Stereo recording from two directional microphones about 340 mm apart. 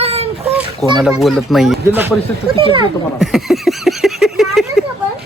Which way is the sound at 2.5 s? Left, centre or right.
Centre.